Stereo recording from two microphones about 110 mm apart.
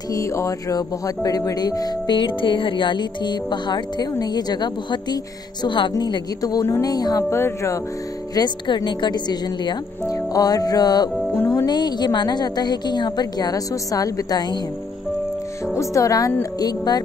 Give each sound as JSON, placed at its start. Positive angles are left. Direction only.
{"t": 0.1, "sound": "speech", "side_deg": 30}
{"t": 7.2, "sound": "speech", "side_deg": 25}
{"t": 8.4, "sound": "a woman's voice", "side_deg": 45}
{"t": 10.0, "sound": "speech", "side_deg": 30}
{"t": 15.6, "sound": "speech", "side_deg": 25}